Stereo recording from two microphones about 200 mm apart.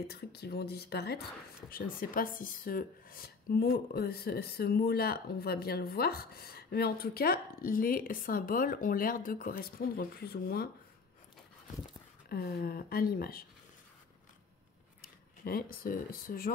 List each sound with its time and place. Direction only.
0.1 s speech: 55° left (ahead or behind)
12.3 s speech: 50° left (ahead or behind)
15.0 s speech: 45° left (ahead or behind)